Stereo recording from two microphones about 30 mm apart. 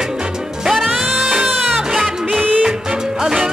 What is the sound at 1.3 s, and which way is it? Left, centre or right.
Music, centre.